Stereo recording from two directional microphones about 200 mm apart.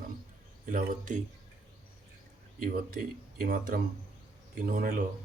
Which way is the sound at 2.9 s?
50° right (ahead or behind).